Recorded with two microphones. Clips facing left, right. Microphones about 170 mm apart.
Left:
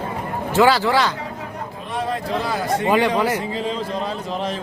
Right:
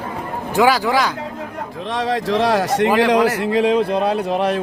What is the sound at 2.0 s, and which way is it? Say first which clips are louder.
A man's voice: right 5 dB; 90° right.